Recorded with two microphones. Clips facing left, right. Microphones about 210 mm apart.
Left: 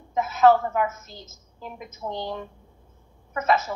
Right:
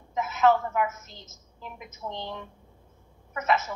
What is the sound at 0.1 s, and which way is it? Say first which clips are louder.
A woman's voice: left 4 dB; 35° left (ahead or behind).